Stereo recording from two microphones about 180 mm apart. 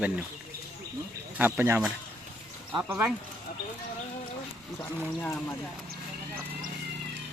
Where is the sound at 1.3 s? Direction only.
10° right (ahead or behind).